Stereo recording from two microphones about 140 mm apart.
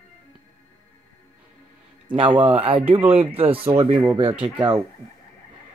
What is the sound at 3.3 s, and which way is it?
Speech, 40° right (ahead or behind).